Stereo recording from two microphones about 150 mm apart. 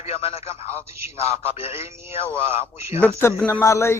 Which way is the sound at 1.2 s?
40° left (ahead or behind).